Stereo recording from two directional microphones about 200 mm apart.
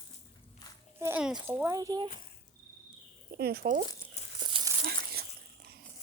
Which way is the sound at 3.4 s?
50° right (ahead or behind).